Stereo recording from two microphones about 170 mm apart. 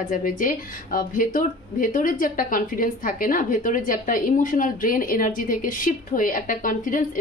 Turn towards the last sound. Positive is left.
turn(degrees=55)  # may be behind; listen again after turning